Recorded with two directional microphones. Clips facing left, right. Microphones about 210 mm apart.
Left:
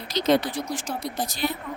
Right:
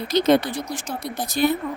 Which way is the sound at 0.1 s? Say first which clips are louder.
Right 4 dB; 55° right (ahead or behind).